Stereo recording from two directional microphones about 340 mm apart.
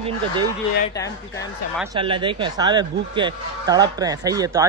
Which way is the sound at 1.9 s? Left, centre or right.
Centre.